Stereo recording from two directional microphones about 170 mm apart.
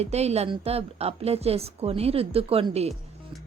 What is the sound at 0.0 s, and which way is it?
A woman's voice, 40° right (ahead or behind).